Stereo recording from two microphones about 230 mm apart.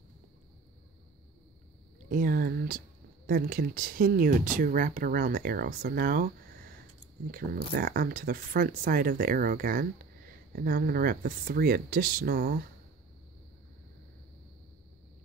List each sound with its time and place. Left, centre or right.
2.0 s speech: right
7.7 s speech: right